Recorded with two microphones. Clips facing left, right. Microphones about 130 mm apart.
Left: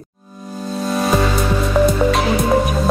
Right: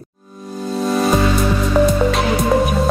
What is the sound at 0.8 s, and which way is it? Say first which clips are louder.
Music: right 1 dB; centre (ahead or behind).